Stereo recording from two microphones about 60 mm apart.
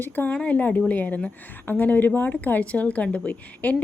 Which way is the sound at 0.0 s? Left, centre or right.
Left.